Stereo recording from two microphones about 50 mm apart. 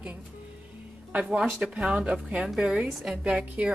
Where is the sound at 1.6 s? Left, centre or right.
Centre.